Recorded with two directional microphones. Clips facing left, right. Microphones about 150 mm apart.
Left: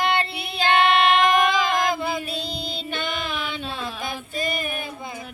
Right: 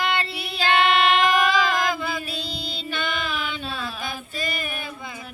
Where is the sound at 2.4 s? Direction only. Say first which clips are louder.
Left 2 dB; 55° left (ahead or behind).